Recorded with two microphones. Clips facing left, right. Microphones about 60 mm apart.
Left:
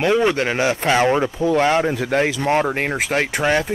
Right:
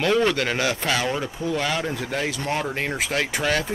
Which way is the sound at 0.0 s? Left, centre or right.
Centre.